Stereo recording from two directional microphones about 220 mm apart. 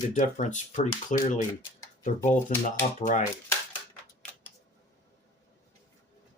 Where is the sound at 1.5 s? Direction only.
15° left (ahead or behind).